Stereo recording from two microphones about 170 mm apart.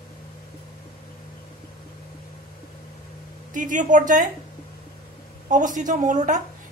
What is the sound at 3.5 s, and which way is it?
Speech, 50° right (ahead or behind).